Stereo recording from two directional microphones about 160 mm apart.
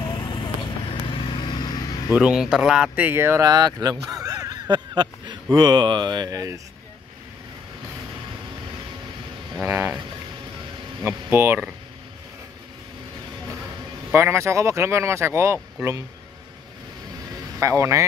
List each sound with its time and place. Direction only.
0.0 s vehicle: 30° left (ahead or behind)
2.1 s speech: 5° right (ahead or behind); by 6.6 s 20° right (ahead or behind)
9.6 s speech: 15° right (ahead or behind)
11.0 s speech: 15° right (ahead or behind)
14.1 s speech: 15° right (ahead or behind)
17.6 s speech: 20° right (ahead or behind)